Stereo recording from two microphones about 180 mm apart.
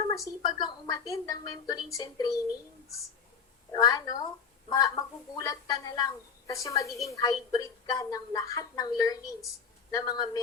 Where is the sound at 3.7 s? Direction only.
20° left (ahead or behind).